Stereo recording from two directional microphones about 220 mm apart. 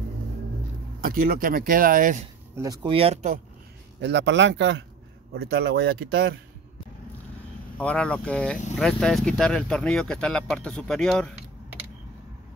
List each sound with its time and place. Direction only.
1.0 s speech: 40° right (ahead or behind)
2.5 s speech: 15° right (ahead or behind)
4.0 s speech: 50° right (ahead or behind)
7.7 s speech: 5° left (ahead or behind)